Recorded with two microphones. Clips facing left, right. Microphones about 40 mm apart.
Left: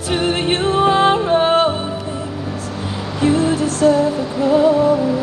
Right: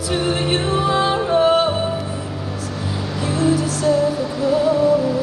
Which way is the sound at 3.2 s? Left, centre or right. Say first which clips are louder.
Left 3 dB; left.